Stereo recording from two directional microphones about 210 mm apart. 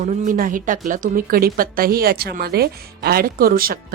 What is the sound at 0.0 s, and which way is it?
A woman's voice, 35° right (ahead or behind).